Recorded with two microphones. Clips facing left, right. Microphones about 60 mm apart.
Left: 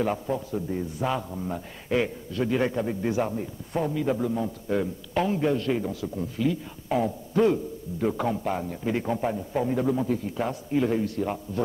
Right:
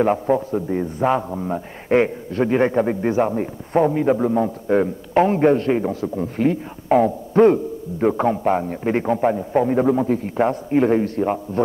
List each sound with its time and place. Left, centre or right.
0.0 s a man's voice: right